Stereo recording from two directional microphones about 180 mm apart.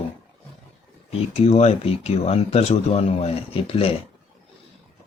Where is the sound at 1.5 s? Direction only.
35° left (ahead or behind).